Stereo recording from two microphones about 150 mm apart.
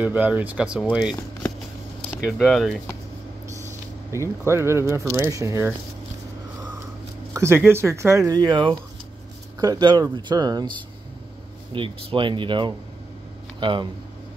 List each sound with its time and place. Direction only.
0.0 s speech: 10° right (ahead or behind)
2.3 s speech: 5° left (ahead or behind)
4.1 s speech: 20° right (ahead or behind)
7.3 s speech: 15° right (ahead or behind)
11.7 s speech: 35° right (ahead or behind)